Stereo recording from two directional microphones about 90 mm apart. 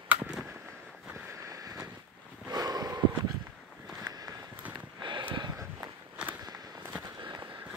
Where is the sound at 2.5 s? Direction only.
45° right (ahead or behind).